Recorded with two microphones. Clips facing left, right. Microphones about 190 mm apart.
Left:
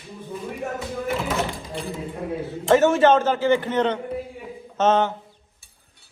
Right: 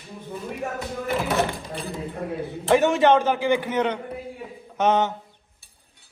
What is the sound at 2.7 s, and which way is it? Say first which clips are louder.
A man's voice: left 2 dB; 15° right (ahead or behind).